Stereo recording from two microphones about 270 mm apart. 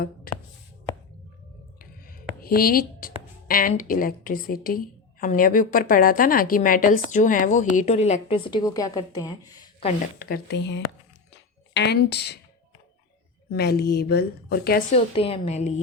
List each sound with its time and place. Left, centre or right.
0.3 s a sound: left
1.8 s music: left
5.2 s a woman's voice: left; by 9.3 s centre
9.8 s a woman's voice: left
11.3 s a sound: left
13.5 s a woman's voice: left
14.9 s a woman's voice: left